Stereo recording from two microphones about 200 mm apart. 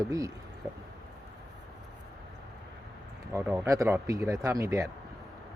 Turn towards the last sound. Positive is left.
turn(degrees=-15)  # may be behind; listen again after turning